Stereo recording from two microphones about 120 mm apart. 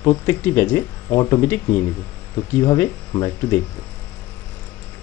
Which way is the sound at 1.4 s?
20° left (ahead or behind).